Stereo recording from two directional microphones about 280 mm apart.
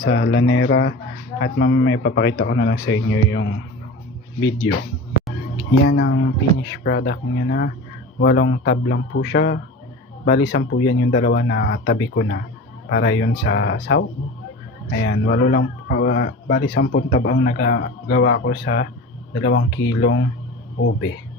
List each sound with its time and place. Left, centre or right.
0.0 s speech: left
5.9 s speech: left
15.0 s speech: left